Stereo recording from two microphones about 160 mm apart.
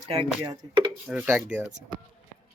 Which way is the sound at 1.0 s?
10° right (ahead or behind).